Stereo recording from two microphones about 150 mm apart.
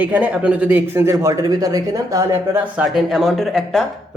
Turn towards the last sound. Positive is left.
turn(degrees=0)  # may be behind; listen again after turning